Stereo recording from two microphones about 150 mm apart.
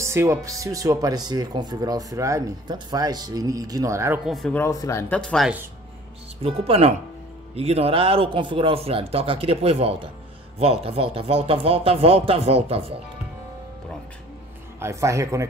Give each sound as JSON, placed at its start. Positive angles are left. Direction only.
{"t": 0.0, "sound": "speech", "side_deg": -15}
{"t": 4.3, "sound": "speech", "side_deg": 0}
{"t": 4.6, "sound": "speech", "side_deg": 20}
{"t": 5.1, "sound": "speech", "side_deg": 5}
{"t": 6.4, "sound": "a man's voice", "side_deg": -40}
{"t": 14.8, "sound": "speech", "side_deg": -20}